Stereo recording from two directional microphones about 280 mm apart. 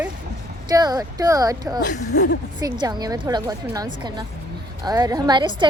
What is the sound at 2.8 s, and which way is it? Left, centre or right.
A woman's voice, centre.